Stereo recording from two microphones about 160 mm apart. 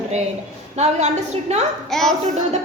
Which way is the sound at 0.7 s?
45° right (ahead or behind).